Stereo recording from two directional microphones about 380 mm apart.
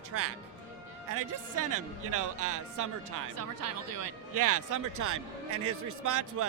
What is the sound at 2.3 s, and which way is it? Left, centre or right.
A man's voice, right.